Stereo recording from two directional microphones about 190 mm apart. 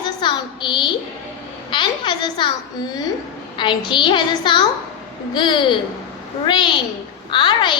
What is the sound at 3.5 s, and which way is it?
A woman's voice, 25° left (ahead or behind).